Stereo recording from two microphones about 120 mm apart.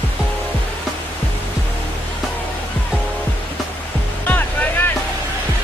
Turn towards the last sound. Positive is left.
turn(degrees=15)  # may be behind; listen again after turning